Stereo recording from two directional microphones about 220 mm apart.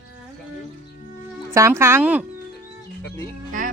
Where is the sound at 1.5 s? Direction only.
15° right (ahead or behind).